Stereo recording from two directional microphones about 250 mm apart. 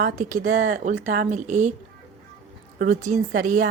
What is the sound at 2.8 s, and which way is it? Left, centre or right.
Speech, right.